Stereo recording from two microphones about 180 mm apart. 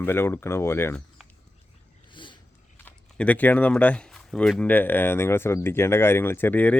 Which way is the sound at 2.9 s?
10° left (ahead or behind).